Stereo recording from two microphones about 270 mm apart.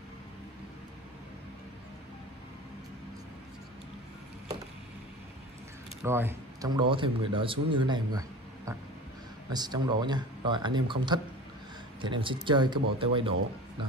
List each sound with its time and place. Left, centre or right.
6.0 s a man's voice: centre